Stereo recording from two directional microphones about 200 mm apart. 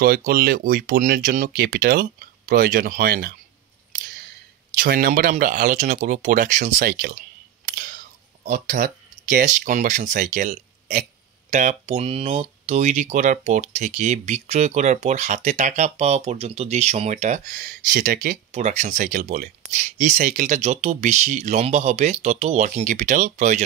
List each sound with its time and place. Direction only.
0.0 s speech: 50° right (ahead or behind)
4.7 s speech: 45° right (ahead or behind)
7.6 s camera: 45° right (ahead or behind)
8.5 s speech: 40° right (ahead or behind)